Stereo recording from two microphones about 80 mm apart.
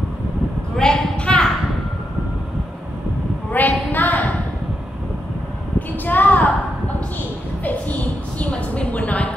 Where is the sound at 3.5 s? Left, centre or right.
Left.